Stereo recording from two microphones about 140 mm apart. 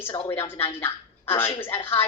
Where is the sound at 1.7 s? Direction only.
40° left (ahead or behind).